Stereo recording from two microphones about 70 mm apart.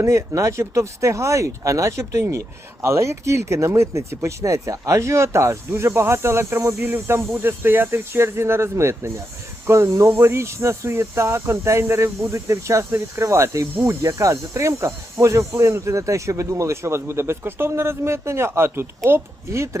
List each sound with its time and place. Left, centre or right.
0.0 s speech: right
6.8 s speech: right